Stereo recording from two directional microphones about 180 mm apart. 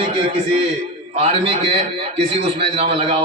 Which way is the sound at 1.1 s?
35° right (ahead or behind).